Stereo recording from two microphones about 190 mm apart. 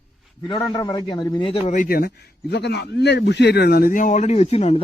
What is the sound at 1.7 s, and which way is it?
A man's voice, 45° left (ahead or behind).